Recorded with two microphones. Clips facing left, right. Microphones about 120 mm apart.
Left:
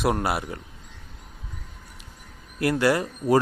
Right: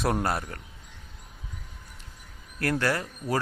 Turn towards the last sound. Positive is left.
turn(degrees=15)  # may be behind; listen again after turning